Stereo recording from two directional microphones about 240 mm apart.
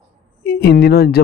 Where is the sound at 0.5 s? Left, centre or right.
Left.